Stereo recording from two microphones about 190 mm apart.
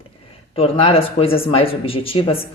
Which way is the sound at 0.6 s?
30° left (ahead or behind).